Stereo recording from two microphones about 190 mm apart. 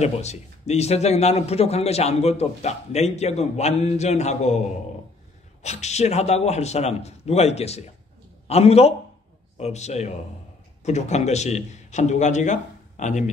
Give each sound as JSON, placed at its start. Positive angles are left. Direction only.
{"t": 0.0, "sound": "a man's voice", "side_deg": 35}